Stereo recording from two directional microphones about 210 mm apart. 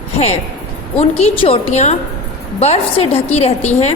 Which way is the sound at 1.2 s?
30° left (ahead or behind).